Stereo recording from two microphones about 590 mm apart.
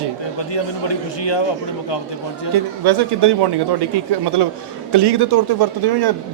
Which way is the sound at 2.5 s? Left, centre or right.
Right.